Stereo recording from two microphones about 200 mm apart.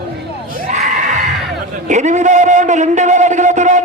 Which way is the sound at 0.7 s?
35° right (ahead or behind).